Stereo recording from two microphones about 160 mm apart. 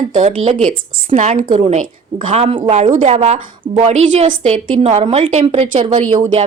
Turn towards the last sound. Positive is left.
turn(degrees=-50)  # may be behind; listen again after turning